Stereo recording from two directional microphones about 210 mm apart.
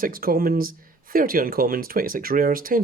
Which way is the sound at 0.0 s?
45° right (ahead or behind).